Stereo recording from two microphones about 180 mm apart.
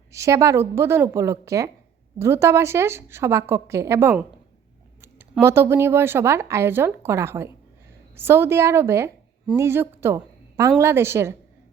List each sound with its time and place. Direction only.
0.1 s speech: 15° right (ahead or behind)
5.3 s speech: 15° right (ahead or behind)